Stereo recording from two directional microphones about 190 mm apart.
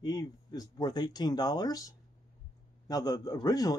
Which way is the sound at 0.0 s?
20° left (ahead or behind).